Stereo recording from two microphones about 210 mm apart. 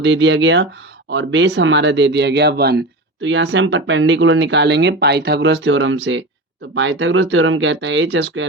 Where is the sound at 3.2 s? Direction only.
60° right (ahead or behind).